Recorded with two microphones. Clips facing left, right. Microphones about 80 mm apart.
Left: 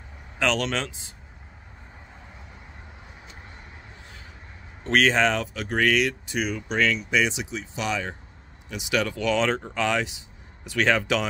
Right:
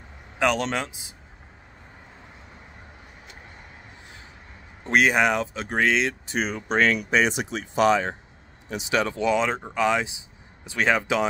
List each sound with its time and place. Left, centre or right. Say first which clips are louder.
0.4 s speech: right 2 dB; right
4.8 s speech: right 1 dB; centre
6.2 s speech: right 1 dB; right
9.3 s speech: even; centre